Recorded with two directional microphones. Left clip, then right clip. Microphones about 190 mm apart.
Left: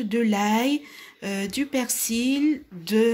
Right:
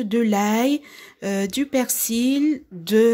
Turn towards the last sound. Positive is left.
turn(degrees=-45)  # may be behind; listen again after turning